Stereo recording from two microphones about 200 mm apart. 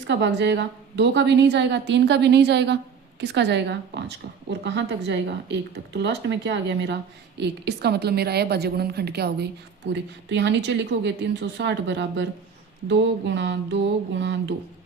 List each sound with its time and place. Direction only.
0.1 s a woman's voice: 60° right (ahead or behind)